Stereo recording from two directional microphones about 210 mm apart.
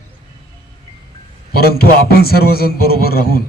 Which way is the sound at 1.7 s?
45° left (ahead or behind).